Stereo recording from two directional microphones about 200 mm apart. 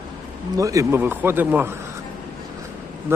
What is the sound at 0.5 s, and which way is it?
Speech, 15° right (ahead or behind).